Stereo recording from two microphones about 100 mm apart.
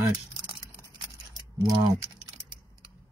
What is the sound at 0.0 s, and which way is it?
Typing, 45° right (ahead or behind).